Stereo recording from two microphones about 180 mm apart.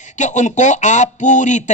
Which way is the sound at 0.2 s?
40° left (ahead or behind).